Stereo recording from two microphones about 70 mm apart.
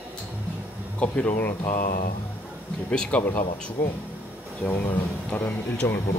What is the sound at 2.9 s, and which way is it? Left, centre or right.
Speech, centre.